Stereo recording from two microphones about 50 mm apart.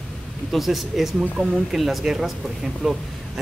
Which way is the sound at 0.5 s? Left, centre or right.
Centre.